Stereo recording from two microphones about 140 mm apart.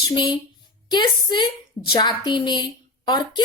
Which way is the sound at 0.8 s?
35° left (ahead or behind).